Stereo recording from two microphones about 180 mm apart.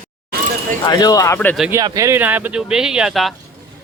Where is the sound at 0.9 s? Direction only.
20° left (ahead or behind).